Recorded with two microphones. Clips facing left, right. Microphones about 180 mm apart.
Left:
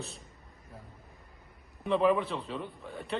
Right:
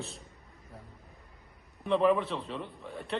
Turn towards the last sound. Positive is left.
turn(degrees=0)  # may be behind; listen again after turning